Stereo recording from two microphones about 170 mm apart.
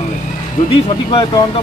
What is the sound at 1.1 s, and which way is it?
Speech, 30° left (ahead or behind).